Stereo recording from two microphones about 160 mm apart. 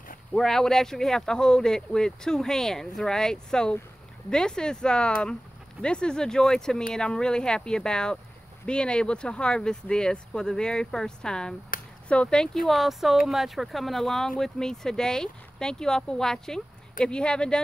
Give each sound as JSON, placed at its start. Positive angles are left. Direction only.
{"t": 0.3, "sound": "speech", "side_deg": 5}
{"t": 11.7, "sound": "a sound", "side_deg": 60}
{"t": 12.1, "sound": "speech", "side_deg": 5}